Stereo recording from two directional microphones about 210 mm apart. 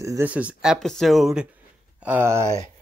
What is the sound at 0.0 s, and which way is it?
Speech, 10° right (ahead or behind).